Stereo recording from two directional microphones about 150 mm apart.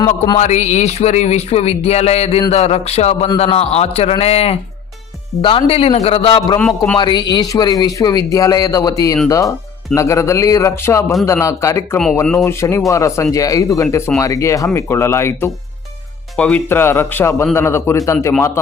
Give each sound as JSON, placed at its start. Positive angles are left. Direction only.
{"t": 0.3, "sound": "a man's voice", "side_deg": 50}
{"t": 6.6, "sound": "a man's voice", "side_deg": 10}
{"t": 6.9, "sound": "a man's voice", "side_deg": 30}
{"t": 12.2, "sound": "speech", "side_deg": 5}
{"t": 12.5, "sound": "a man's voice", "side_deg": 20}